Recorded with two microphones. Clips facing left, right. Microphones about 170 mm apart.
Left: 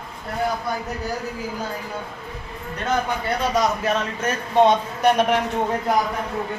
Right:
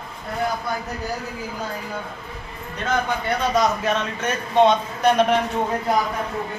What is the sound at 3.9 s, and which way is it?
Speech, 10° left (ahead or behind).